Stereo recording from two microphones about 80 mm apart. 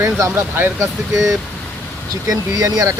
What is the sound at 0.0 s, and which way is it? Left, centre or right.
Speech, right.